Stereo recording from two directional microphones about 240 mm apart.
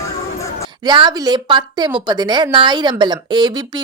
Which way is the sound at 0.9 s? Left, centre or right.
Centre.